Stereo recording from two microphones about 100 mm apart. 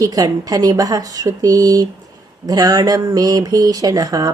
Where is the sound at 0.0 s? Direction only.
40° right (ahead or behind).